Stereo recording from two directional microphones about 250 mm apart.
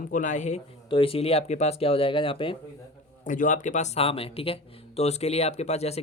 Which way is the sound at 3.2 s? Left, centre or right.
Left.